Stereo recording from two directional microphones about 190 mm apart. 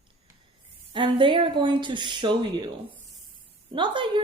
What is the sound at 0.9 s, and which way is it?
Speech, 25° right (ahead or behind).